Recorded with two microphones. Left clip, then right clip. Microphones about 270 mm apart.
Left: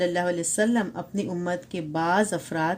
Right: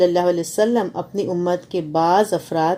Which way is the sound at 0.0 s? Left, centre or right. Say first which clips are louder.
Right 8 dB; left.